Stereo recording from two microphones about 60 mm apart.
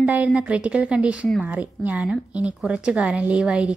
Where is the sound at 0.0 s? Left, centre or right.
Right.